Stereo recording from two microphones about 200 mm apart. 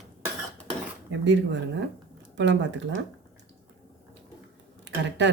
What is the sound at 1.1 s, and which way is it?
Speech, 65° right (ahead or behind).